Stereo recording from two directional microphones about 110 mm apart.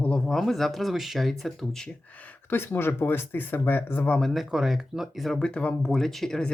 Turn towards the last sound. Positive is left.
turn(degrees=5)  # may be behind; listen again after turning